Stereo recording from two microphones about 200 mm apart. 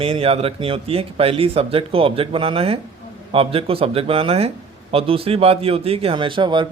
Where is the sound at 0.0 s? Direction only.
30° right (ahead or behind).